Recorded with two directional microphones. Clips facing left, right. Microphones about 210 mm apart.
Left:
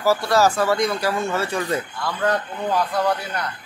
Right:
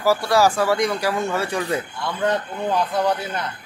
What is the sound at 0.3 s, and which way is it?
Speech, 10° right (ahead or behind).